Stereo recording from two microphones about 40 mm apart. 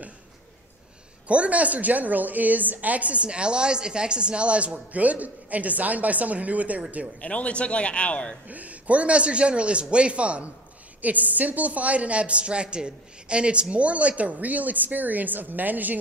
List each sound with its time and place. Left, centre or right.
1.2 s a woman's voice: right
7.2 s a man's voice: left
8.5 s a woman's voice: right
11.0 s a woman's voice: right